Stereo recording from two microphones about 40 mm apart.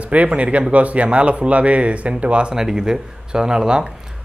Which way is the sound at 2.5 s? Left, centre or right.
Centre.